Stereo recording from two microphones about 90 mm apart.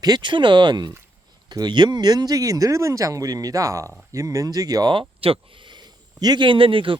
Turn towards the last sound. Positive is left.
turn(degrees=-75)  # may be behind; listen again after turning